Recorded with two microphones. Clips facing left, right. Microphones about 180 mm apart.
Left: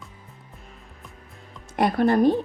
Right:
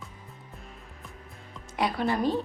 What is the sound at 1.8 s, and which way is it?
Speech, 50° left (ahead or behind).